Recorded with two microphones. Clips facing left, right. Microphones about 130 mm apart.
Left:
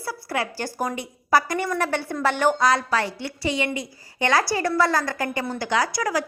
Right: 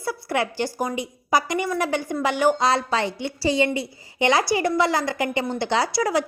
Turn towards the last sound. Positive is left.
turn(degrees=-25)  # may be behind; listen again after turning